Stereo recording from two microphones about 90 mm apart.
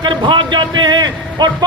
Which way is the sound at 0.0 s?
60° right (ahead or behind).